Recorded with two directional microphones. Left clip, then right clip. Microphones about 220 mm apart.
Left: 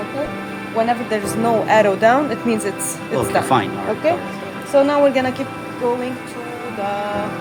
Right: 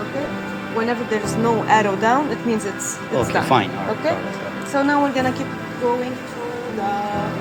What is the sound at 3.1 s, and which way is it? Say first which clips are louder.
Speech: left 1 dB; 15° left (ahead or behind).